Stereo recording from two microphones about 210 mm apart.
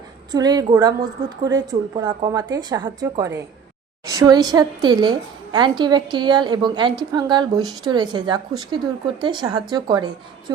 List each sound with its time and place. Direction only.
0.3 s a woman's voice: 20° right (ahead or behind)